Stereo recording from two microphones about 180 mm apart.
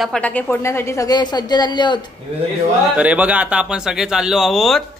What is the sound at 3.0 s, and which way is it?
Speech, 5° right (ahead or behind).